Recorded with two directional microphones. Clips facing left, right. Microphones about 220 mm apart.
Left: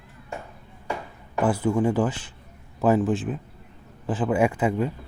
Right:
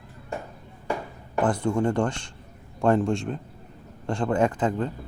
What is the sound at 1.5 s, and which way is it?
Speech, 5° left (ahead or behind).